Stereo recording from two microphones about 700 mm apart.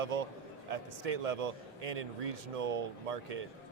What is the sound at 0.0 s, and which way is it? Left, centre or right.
A man's voice, right.